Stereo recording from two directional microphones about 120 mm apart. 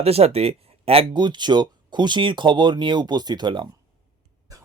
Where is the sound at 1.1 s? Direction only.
40° right (ahead or behind).